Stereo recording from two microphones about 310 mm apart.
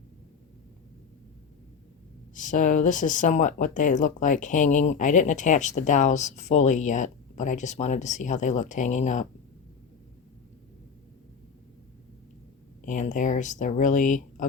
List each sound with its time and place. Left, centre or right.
2.3 s speech: left
12.8 s speech: left